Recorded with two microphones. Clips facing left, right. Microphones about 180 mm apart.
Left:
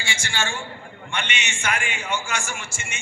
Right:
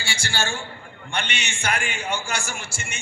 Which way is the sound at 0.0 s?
35° right (ahead or behind).